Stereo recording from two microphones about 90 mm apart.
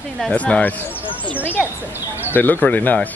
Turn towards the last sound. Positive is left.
turn(degrees=20)  # may be behind; listen again after turning